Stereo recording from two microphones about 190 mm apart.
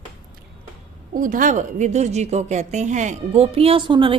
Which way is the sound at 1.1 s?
45° right (ahead or behind).